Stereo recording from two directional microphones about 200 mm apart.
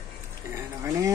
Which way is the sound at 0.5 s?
15° right (ahead or behind).